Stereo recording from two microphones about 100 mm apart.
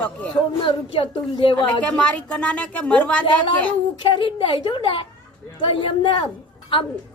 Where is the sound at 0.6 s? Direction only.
60° left (ahead or behind).